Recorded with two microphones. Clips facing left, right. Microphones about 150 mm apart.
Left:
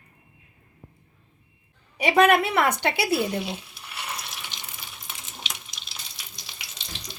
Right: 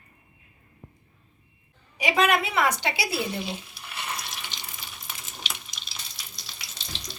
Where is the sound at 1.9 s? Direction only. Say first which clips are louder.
Left 5 dB; 55° left (ahead or behind).